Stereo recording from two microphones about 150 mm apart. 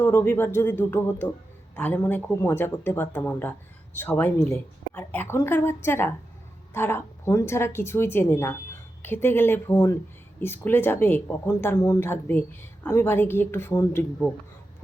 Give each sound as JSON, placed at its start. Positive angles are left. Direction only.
{"t": 0.0, "sound": "speech", "side_deg": 15}